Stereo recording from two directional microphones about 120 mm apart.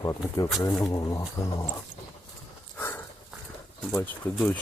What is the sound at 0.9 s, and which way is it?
Speech, 30° left (ahead or behind).